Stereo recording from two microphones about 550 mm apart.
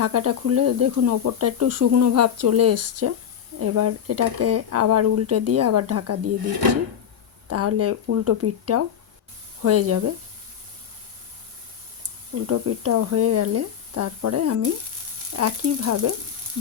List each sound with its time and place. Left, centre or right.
0.0 s speech: right
7.5 s speech: right
12.5 s speech: right